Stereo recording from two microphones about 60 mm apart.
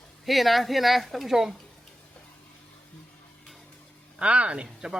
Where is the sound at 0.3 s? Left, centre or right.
Centre.